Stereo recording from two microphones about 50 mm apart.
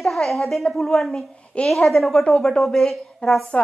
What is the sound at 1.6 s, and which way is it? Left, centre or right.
Speech, centre.